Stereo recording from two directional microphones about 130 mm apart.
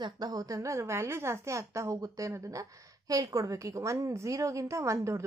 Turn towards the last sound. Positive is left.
turn(degrees=-20)  # may be behind; listen again after turning